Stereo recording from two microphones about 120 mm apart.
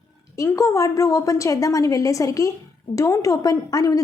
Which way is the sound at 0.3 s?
25° left (ahead or behind).